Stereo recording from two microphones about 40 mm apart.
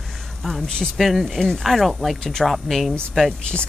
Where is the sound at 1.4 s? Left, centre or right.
Centre.